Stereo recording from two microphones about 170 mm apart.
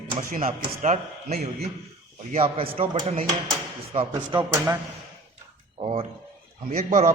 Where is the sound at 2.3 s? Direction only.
35° right (ahead or behind).